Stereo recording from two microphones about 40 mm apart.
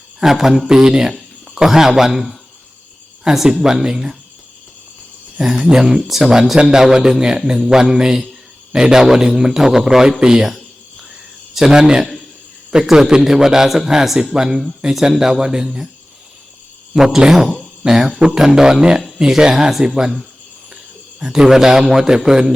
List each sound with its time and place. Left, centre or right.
0.2 s a man's voice: centre
0.7 s a man's voice: centre
5.6 s a man's voice: centre
16.9 s a man's voice: centre